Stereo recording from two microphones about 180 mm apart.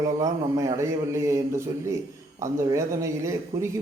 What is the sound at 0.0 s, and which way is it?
A man's voice, 20° right (ahead or behind).